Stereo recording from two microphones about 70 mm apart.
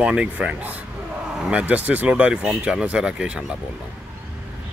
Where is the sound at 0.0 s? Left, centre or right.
Centre.